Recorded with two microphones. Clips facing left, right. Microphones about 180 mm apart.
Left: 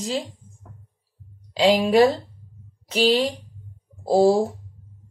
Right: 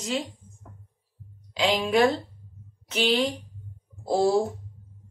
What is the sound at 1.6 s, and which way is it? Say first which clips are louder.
A woman's voice: left 5 dB; 35° left (ahead or behind).